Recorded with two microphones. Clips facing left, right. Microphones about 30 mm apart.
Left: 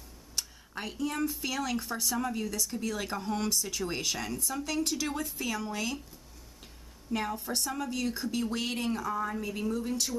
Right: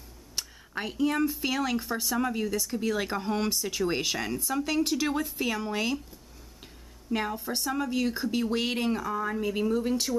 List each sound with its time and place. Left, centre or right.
0.4 s speech: centre
7.1 s speech: centre